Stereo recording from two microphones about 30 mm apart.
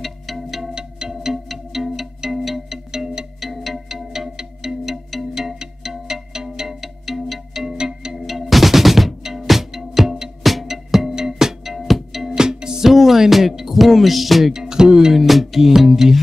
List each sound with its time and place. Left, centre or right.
0.0 s music: centre
0.7 s music: right
1.5 s music: centre
6.8 s music: centre
7.7 s music: right
8.3 s music: centre
10.4 s music: centre
12.4 s music: right
12.9 s music: centre
14.5 s music: right
15.1 s music: centre